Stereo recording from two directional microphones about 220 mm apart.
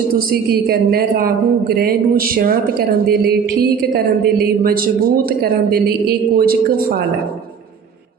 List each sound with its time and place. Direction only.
0.7 s speech: 45° right (ahead or behind)
5.4 s speech: 45° right (ahead or behind)